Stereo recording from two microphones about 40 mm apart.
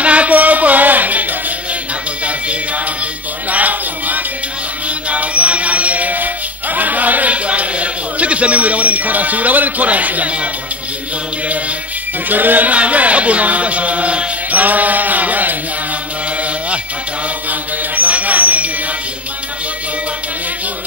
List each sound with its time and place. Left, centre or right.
0.0 s music: right
3.4 s music: right
12.3 s speech: right
17.5 s mantra: right